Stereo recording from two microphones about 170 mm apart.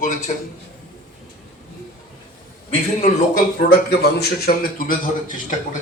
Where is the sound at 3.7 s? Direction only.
70° left (ahead or behind); by 5.6 s 55° left (ahead or behind).